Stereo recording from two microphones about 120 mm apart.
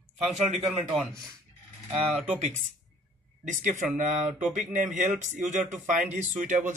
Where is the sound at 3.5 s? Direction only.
90° right.